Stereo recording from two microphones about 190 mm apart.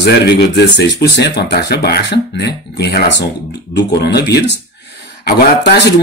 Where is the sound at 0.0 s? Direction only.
60° left (ahead or behind).